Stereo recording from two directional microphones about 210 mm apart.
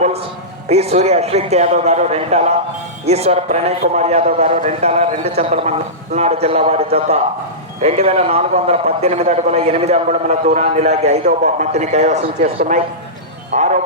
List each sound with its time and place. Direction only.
0.7 s a man's voice: 30° right (ahead or behind)
13.5 s music: 35° right (ahead or behind)